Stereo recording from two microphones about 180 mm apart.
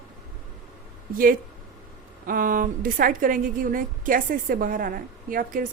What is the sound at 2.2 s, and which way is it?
A woman's voice, 50° right (ahead or behind).